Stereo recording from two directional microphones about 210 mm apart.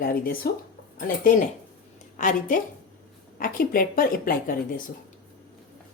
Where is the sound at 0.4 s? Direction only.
45° left (ahead or behind).